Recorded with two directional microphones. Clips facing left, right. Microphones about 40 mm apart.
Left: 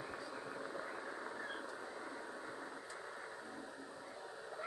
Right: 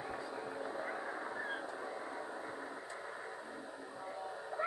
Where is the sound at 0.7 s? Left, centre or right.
Right.